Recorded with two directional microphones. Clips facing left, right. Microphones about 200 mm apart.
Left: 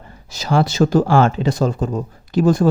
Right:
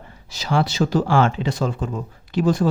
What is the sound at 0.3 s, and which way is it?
Speech, 45° left (ahead or behind).